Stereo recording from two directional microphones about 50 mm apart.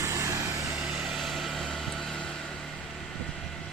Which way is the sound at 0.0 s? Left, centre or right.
Right.